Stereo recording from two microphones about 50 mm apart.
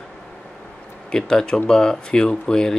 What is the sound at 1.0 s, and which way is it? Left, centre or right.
Speech, centre.